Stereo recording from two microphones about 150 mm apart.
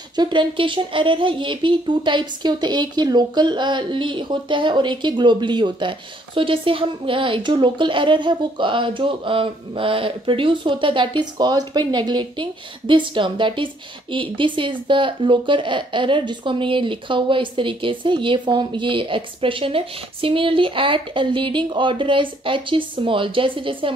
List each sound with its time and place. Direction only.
0.1 s speech: 30° right (ahead or behind)